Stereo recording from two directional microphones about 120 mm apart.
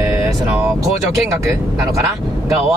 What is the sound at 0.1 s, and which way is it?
Vehicle, 15° right (ahead or behind).